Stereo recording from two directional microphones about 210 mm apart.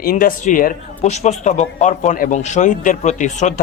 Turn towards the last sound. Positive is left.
turn(degrees=35)  # may be behind; listen again after turning